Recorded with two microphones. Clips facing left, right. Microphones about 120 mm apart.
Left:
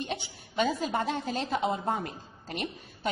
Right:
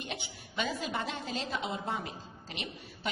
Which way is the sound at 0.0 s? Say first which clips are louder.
Left 6 dB; 40° left (ahead or behind).